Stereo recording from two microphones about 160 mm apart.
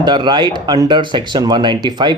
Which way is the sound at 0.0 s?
30° right (ahead or behind).